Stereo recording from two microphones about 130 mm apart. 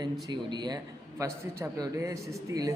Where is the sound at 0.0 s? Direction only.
35° right (ahead or behind).